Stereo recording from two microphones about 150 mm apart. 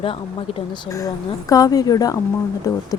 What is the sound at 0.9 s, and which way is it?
Speech, 20° left (ahead or behind).